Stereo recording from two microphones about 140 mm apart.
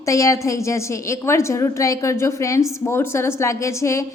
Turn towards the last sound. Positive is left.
turn(degrees=20)  # may be behind; listen again after turning